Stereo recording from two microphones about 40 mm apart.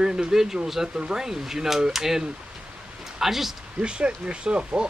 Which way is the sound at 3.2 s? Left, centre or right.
Centre.